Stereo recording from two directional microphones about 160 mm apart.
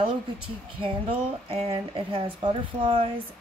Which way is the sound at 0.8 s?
35° right (ahead or behind).